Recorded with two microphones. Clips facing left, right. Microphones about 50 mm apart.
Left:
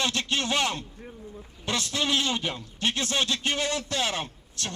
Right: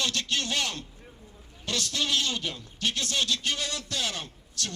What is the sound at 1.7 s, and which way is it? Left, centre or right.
Speech, left.